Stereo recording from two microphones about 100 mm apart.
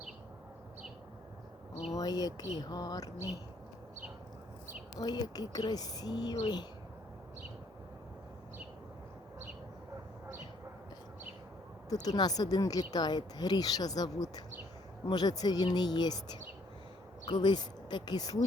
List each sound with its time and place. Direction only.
1.9 s a woman's voice: 40° left (ahead or behind)
4.9 s a woman's voice: 40° left (ahead or behind)
11.9 s a woman's voice: 40° left (ahead or behind)